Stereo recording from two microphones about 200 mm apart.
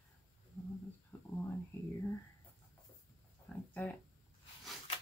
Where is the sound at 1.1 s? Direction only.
10° left (ahead or behind).